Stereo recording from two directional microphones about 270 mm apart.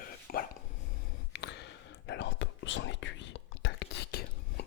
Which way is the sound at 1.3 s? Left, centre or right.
Left.